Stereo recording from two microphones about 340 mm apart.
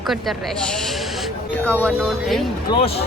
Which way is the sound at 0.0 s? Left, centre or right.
Centre.